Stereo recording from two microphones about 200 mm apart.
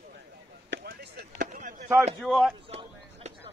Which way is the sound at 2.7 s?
30° right (ahead or behind).